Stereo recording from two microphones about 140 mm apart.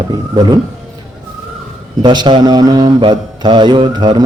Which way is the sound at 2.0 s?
30° right (ahead or behind).